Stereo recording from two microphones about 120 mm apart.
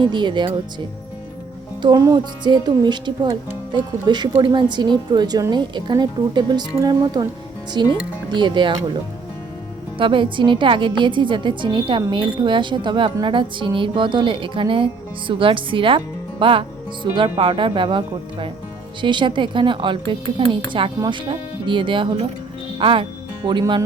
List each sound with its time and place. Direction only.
0.0 s speech: 40° right (ahead or behind)
1.8 s speech: 35° right (ahead or behind)
10.0 s a woman's voice: 45° right (ahead or behind)